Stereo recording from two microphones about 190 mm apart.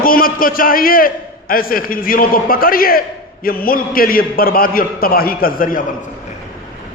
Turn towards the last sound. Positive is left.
turn(degrees=50)  # may be behind; listen again after turning